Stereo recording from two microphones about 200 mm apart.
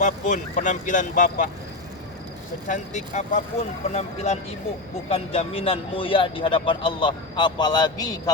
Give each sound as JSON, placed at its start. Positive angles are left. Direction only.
{"t": 0.0, "sound": "speech", "side_deg": 40}
{"t": 2.6, "sound": "speech", "side_deg": 40}